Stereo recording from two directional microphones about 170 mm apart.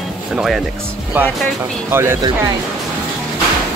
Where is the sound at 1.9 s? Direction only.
15° right (ahead or behind).